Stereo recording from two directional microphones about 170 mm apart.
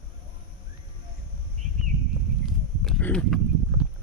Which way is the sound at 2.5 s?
Centre (ahead or behind).